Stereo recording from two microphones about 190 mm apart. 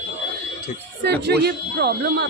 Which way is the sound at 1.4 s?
55° right (ahead or behind).